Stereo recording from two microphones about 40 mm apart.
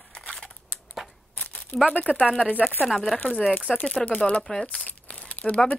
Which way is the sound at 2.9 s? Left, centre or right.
Centre.